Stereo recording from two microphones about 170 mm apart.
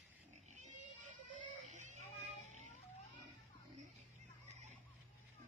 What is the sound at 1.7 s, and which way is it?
Child singing, 45° right (ahead or behind).